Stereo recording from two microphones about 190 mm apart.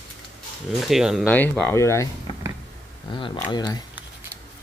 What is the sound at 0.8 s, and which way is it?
Speech, centre (ahead or behind).